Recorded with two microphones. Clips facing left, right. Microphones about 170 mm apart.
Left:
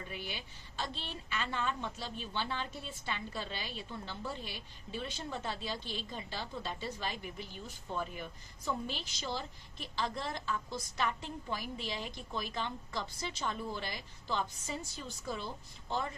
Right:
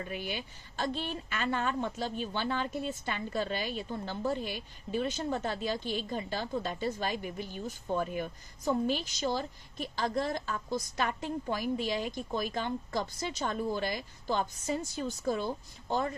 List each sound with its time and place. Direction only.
0.1 s a woman's voice: 50° right (ahead or behind)